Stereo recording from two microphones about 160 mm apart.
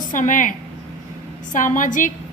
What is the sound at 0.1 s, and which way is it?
Speech, 55° left (ahead or behind).